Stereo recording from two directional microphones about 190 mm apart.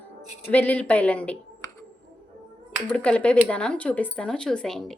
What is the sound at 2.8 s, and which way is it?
A woman's voice, 5° left (ahead or behind).